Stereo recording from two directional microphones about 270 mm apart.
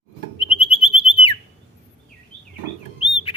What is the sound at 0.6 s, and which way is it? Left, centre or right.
Whistle, centre.